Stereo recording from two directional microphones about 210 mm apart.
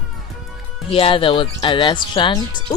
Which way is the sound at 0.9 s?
25° left (ahead or behind).